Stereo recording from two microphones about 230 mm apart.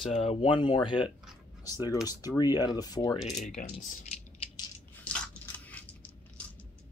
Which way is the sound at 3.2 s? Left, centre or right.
Left.